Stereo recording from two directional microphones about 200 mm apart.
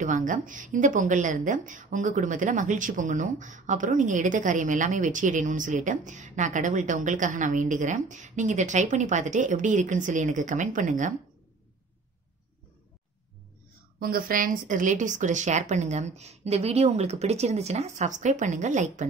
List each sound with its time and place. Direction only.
0.0 s a woman's voice: 40° right (ahead or behind)
13.9 s a woman's voice: 45° right (ahead or behind)